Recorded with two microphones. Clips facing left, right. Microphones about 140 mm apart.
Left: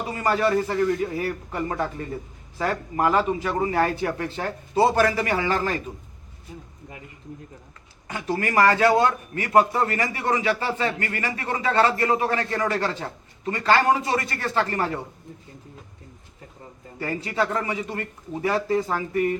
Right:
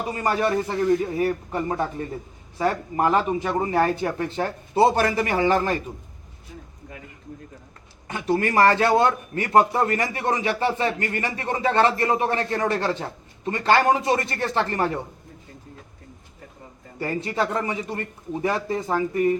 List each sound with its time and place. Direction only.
0.2 s a man's voice: 15° right (ahead or behind)
8.0 s a man's voice: 25° right (ahead or behind)
17.0 s a man's voice: 25° right (ahead or behind)